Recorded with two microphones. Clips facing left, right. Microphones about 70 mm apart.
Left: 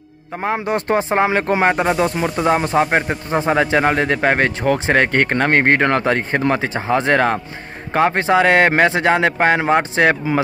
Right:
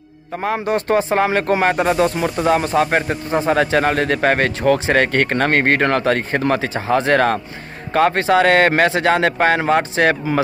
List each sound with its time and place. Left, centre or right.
0.7 s speech: left